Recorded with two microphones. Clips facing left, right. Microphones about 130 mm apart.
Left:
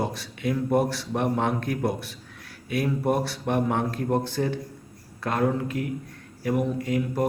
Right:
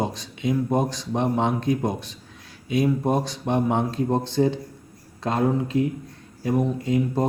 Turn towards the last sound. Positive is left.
turn(degrees=-25)  # may be behind; listen again after turning